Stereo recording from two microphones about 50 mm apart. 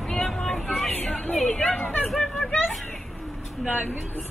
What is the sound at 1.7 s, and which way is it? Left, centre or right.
Chatter, left.